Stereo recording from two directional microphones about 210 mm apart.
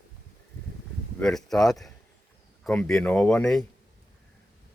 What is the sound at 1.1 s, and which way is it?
Speech, centre (ahead or behind).